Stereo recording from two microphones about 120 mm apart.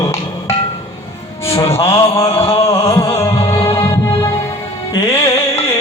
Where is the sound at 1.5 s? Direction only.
25° left (ahead or behind).